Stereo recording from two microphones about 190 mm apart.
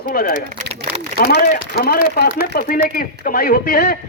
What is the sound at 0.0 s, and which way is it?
Speech, 50° left (ahead or behind).